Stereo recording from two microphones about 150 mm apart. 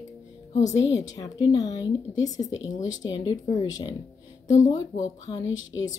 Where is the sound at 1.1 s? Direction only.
25° left (ahead or behind).